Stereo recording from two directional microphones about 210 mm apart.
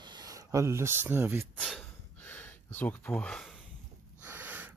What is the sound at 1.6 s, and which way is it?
Gasp, 5° left (ahead or behind).